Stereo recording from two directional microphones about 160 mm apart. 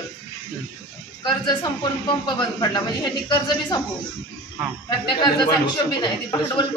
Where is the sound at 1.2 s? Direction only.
25° left (ahead or behind).